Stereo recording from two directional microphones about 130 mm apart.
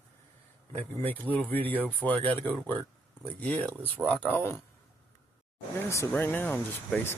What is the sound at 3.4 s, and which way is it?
Speech, 10° left (ahead or behind).